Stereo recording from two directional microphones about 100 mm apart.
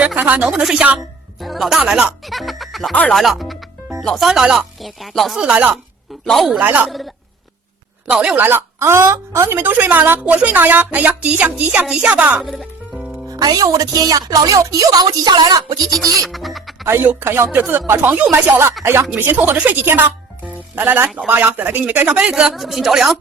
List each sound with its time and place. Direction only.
0.2 s speech: 15° right (ahead or behind)
0.4 s speech: 5° right (ahead or behind)
1.8 s speech: 10° right (ahead or behind)
2.2 s music: centre (ahead or behind)
3.1 s speech: centre (ahead or behind)
6.2 s a man's voice: centre (ahead or behind)
6.5 s speech: 15° right (ahead or behind)
8.1 s speech: 10° right (ahead or behind)
8.4 s a woman's voice: 20° right (ahead or behind)
13.3 s a woman's voice: 40° right (ahead or behind)
16.2 s speech: centre (ahead or behind)
16.8 s a woman's voice: 20° right (ahead or behind); by 23.1 s 5° right (ahead or behind)